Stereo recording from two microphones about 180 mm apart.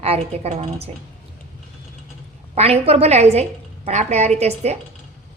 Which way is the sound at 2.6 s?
35° right (ahead or behind).